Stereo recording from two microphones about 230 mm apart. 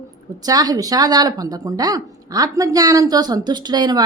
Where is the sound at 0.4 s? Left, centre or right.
Centre.